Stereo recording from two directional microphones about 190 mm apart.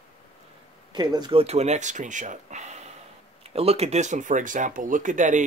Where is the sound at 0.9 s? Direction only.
25° right (ahead or behind).